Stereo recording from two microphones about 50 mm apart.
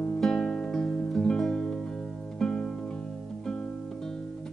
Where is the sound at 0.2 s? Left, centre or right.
Centre.